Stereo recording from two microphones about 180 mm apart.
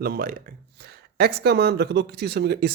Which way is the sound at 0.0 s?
55° right (ahead or behind).